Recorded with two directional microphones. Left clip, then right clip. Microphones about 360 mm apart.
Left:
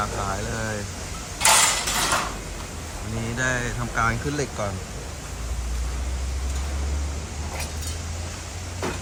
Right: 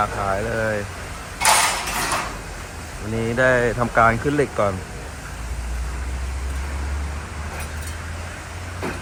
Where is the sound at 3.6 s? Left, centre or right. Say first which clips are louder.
Right 8 dB; centre.